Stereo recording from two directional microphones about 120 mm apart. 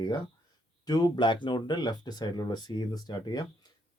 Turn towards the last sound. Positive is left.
turn(degrees=35)  # may be behind; listen again after turning